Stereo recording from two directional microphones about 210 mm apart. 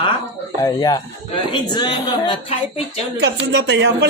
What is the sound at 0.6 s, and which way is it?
A woman's voice, 15° left (ahead or behind).